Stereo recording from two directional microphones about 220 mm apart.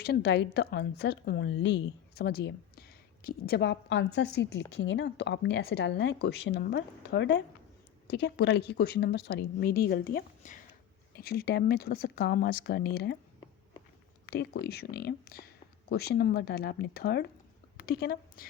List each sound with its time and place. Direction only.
0.0 s a woman's voice: 50° left (ahead or behind)
14.6 s a woman's voice: 45° left (ahead or behind)